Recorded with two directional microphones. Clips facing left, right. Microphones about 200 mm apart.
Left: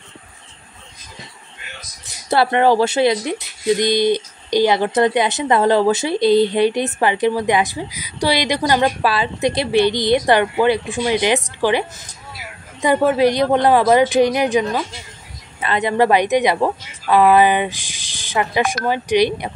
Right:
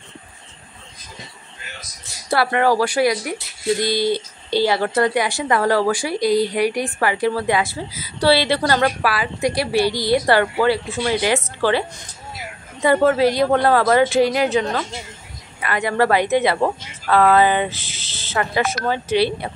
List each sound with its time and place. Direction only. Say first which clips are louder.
2.2 s speech: left 3 dB; 25° left (ahead or behind)
8.8 s speech: left 2 dB; 25° left (ahead or behind)
12.8 s a woman's voice: left 1 dB; 15° left (ahead or behind)